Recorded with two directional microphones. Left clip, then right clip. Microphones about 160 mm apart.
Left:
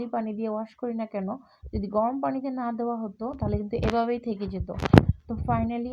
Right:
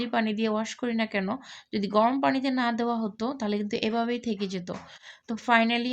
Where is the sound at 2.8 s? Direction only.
35° right (ahead or behind).